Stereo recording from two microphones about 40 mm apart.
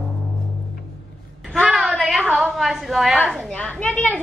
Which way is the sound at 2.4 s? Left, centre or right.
Centre.